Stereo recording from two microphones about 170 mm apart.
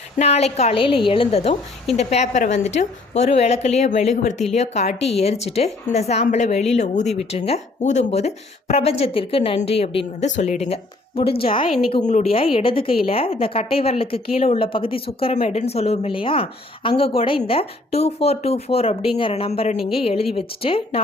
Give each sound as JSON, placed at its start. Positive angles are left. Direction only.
{"t": 0.2, "sound": "a woman's voice", "side_deg": 40}
{"t": 10.2, "sound": "a woman's voice", "side_deg": 45}